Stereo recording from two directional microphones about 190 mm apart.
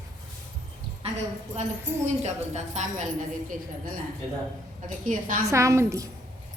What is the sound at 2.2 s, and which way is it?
Speech, 40° right (ahead or behind).